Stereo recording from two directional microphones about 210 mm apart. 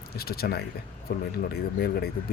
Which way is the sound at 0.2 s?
45° left (ahead or behind).